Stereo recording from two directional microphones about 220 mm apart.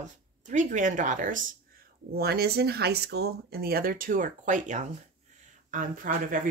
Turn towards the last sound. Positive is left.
turn(degrees=-40)  # may be behind; listen again after turning